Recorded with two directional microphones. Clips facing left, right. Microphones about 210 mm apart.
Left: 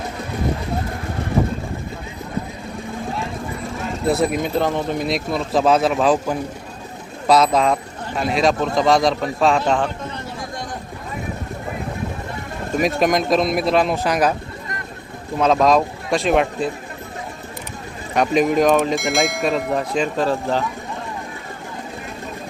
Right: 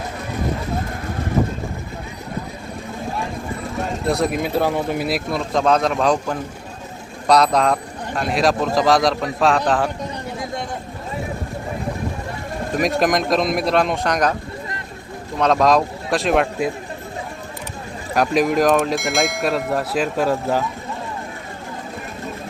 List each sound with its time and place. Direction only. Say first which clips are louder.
4.0 s a man's voice: left 2 dB; centre (ahead or behind)
12.7 s a man's voice: left 1 dB; centre (ahead or behind)
15.4 s a man's voice: left 1 dB; centre (ahead or behind)
18.1 s a man's voice: left 1 dB; centre (ahead or behind)